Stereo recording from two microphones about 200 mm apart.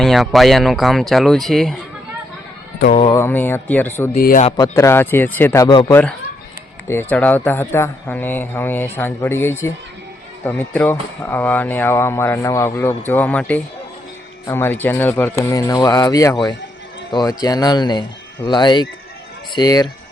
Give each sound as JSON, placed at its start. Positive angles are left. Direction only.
{"t": 0.0, "sound": "speech", "side_deg": 0}
{"t": 3.1, "sound": "speech", "side_deg": 10}
{"t": 4.1, "sound": "a man's voice", "side_deg": 45}
{"t": 4.5, "sound": "speech", "side_deg": 15}